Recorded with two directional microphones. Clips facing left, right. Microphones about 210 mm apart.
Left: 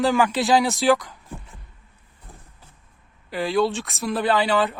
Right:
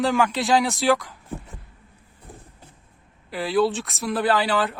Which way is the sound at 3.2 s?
Centre (ahead or behind).